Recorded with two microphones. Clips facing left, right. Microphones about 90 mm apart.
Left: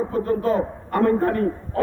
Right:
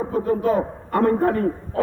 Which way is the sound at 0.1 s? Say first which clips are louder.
Right 5 dB; 15° right (ahead or behind).